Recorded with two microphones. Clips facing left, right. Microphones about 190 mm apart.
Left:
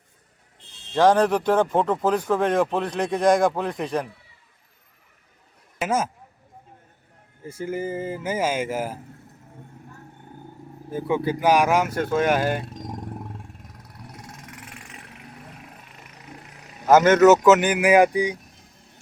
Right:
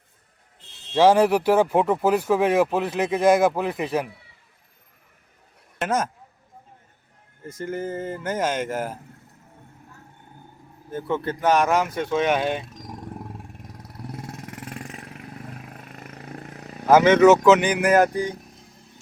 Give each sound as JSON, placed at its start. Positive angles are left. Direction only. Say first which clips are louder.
{"t": 0.9, "sound": "speech", "louder": "right 1 dB", "side_deg": -5}
{"t": 5.8, "sound": "speech", "louder": "even", "side_deg": 5}
{"t": 7.4, "sound": "speech", "louder": "left 1 dB", "side_deg": 10}
{"t": 10.9, "sound": "speech", "louder": "left 2 dB", "side_deg": 10}
{"t": 16.0, "sound": "vehicle", "louder": "right 7 dB", "side_deg": -55}
{"t": 16.9, "sound": "speech", "louder": "even", "side_deg": 5}